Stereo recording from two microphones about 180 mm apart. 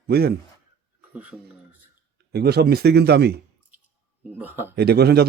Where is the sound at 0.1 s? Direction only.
60° right (ahead or behind).